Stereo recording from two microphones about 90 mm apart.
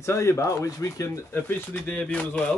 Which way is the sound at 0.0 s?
30° left (ahead or behind).